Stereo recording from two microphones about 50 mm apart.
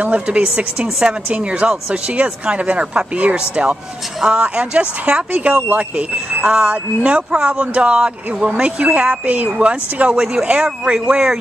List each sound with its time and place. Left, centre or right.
0.0 s speech: right
10.1 s speech: centre
10.4 s speech: right